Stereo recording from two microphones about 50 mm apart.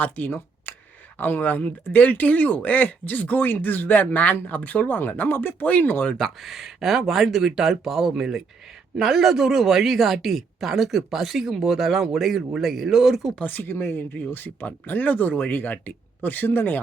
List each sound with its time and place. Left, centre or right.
0.0 s speech: left
6.1 s speech: centre
13.4 s speech: left
13.7 s speech: left